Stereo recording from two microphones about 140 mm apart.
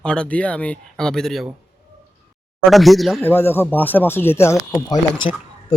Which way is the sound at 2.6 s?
Centre (ahead or behind).